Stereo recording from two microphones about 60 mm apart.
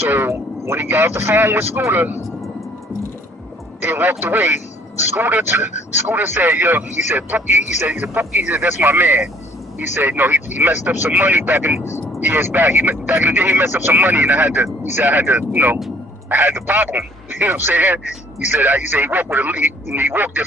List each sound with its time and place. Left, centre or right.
0.0 s speech: right
3.8 s speech: right